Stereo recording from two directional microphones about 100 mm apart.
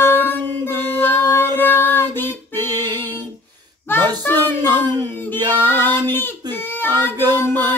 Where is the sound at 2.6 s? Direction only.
45° right (ahead or behind).